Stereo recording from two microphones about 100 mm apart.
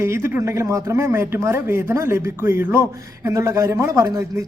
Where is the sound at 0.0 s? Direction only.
25° right (ahead or behind).